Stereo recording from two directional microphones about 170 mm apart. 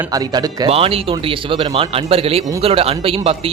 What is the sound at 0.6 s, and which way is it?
A man's voice, 35° right (ahead or behind).